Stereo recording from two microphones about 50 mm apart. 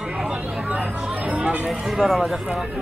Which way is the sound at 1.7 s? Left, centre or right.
Centre.